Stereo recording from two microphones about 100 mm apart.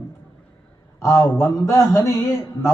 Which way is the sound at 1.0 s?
30° left (ahead or behind).